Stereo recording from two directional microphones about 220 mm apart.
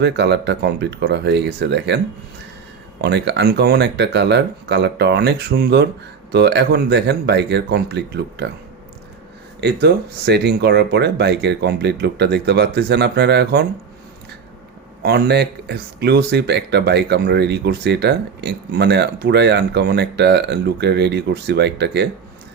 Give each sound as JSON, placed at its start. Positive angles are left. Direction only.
{"t": 0.0, "sound": "speech", "side_deg": -50}
{"t": 3.0, "sound": "speech", "side_deg": -50}
{"t": 9.6, "sound": "speech", "side_deg": -50}
{"t": 15.0, "sound": "speech", "side_deg": -45}